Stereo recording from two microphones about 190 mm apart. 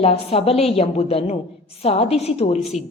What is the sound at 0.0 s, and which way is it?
A woman's voice, 30° left (ahead or behind).